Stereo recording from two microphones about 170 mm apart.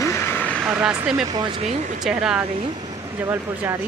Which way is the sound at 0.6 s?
5° right (ahead or behind).